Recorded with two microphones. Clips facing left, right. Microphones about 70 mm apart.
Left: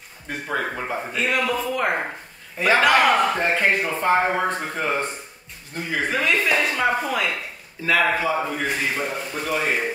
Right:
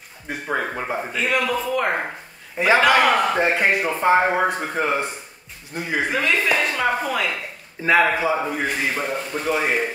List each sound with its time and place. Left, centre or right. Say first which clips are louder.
0.5 s speech: right 2 dB; centre
1.1 s a woman's voice: right 1 dB; centre
2.5 s a man's voice: right 2 dB; centre
2.8 s speech: left 2 dB; centre
6.1 s a woman's voice: even; centre
7.8 s speech: right 3 dB; right